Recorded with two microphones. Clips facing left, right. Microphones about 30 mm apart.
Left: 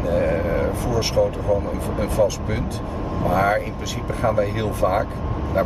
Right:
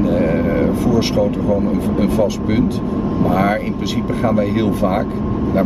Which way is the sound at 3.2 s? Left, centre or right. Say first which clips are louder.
Even; centre.